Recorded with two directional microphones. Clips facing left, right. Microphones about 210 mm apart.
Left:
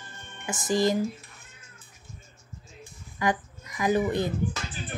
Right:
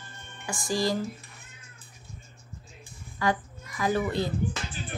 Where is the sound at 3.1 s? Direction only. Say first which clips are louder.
Even; 20° left (ahead or behind).